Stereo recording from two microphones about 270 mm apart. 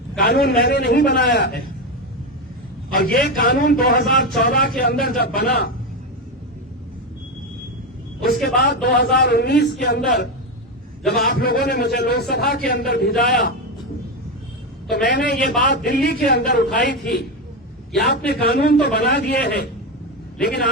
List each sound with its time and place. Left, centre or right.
0.2 s speech: left
2.9 s speech: left
8.4 s speech: left
11.0 s a man's voice: centre
11.3 s speech: left
15.0 s speech: left
18.3 s speech: left